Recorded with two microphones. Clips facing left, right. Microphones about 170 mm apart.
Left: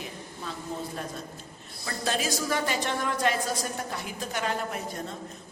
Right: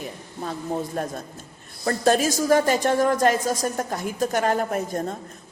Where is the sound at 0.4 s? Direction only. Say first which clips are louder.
Right 8 dB; 50° right (ahead or behind).